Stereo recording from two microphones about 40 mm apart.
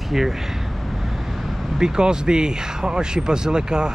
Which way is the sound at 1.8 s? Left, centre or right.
Centre.